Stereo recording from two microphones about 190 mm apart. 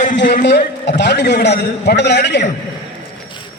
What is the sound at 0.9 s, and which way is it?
A man's voice, 65° left (ahead or behind).